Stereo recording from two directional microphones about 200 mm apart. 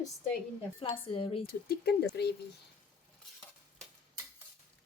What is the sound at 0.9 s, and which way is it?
Speech, 25° left (ahead or behind).